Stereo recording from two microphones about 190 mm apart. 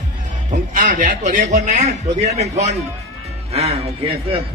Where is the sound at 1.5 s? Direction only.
35° right (ahead or behind).